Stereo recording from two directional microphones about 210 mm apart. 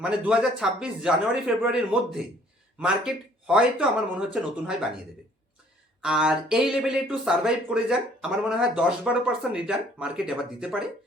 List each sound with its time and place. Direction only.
0.0 s speech: 5° right (ahead or behind)
6.0 s speech: 5° right (ahead or behind)